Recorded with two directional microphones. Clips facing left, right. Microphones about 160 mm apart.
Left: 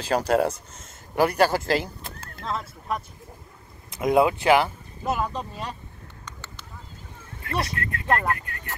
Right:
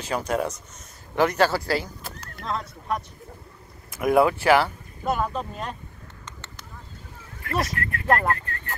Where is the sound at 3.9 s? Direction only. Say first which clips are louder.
Right 1 dB; 20° left (ahead or behind).